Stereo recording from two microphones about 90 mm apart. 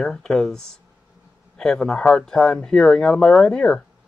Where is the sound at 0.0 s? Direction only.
5° left (ahead or behind).